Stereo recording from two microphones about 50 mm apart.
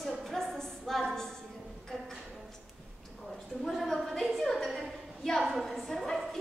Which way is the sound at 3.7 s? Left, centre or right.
Centre.